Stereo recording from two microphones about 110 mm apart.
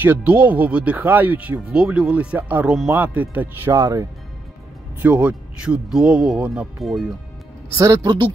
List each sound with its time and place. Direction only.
0.0 s speech: 15° right (ahead or behind)
3.7 s speech: 30° right (ahead or behind)
5.0 s speech: 15° right (ahead or behind)
7.7 s speech: 30° right (ahead or behind)